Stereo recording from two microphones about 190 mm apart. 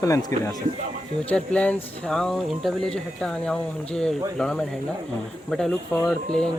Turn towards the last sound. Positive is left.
turn(degrees=5)  # may be behind; listen again after turning